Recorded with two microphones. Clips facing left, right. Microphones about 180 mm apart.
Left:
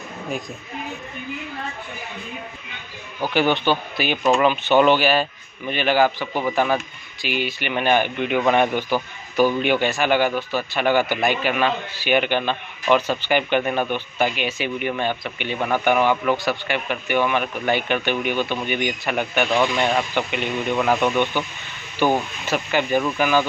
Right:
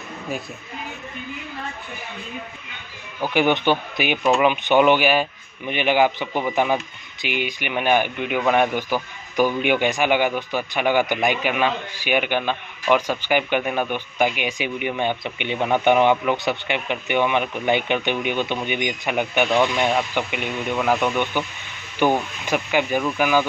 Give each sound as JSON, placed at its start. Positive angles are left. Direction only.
{"t": 3.3, "sound": "speech", "side_deg": -20}
{"t": 19.6, "sound": "speech", "side_deg": 0}